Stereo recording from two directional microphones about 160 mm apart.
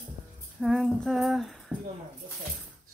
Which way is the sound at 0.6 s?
Centre (ahead or behind).